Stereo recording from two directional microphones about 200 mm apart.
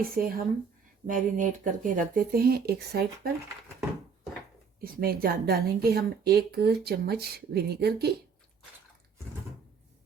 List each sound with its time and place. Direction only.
0.0 s speech: 45° right (ahead or behind)
4.8 s speech: 50° right (ahead or behind)